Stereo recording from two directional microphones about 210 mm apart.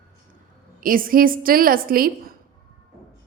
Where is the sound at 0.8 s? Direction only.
40° right (ahead or behind).